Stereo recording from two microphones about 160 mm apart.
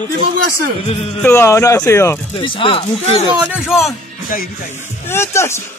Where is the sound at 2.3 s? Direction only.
35° left (ahead or behind).